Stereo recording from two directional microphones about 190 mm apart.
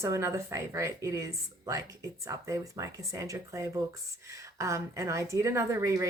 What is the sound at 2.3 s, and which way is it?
Speech, 15° right (ahead or behind).